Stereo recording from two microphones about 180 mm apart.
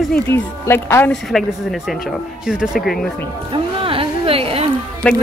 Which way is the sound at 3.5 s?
30° right (ahead or behind).